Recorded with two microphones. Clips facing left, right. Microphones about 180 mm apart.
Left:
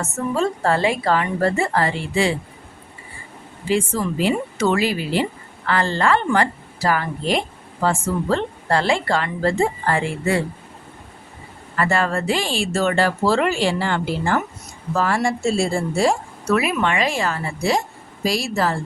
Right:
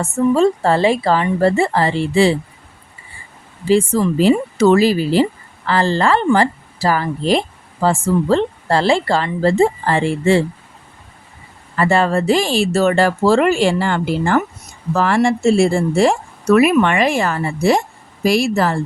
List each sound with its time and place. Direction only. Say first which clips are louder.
0.3 s speech: right 2 dB; 30° right (ahead or behind)
3.7 s speech: right 7 dB; 35° right (ahead or behind)
11.8 s speech: right 5 dB; 30° right (ahead or behind); by 14.3 s 50° right (ahead or behind)
14.9 s speech: right 5 dB; 70° right (ahead or behind)
16.5 s a woman's voice: right 8 dB; 60° right (ahead or behind)